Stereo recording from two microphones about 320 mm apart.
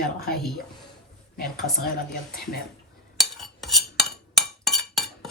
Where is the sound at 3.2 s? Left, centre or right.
Centre.